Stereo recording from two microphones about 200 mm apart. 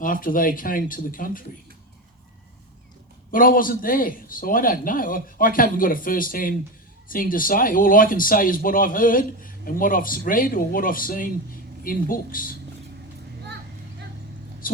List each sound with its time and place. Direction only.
0.0 s speech: 45° left (ahead or behind)
3.3 s speech: 45° left (ahead or behind)
14.6 s vehicle: 45° left (ahead or behind)